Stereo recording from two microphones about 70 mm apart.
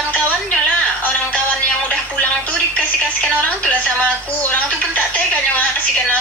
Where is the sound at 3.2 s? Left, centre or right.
Centre.